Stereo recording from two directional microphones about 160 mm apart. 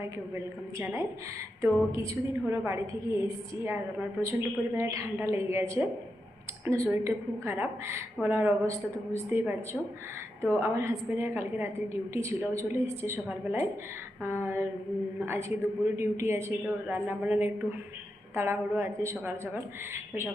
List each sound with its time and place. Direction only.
0.0 s a woman's voice: 15° right (ahead or behind)